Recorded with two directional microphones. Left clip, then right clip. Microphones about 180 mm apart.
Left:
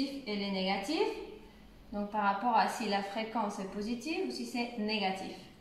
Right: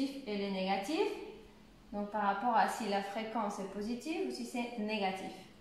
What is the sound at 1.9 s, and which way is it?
A woman's voice, 15° right (ahead or behind).